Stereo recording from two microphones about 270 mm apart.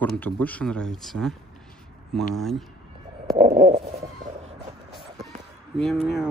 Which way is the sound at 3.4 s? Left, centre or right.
Right.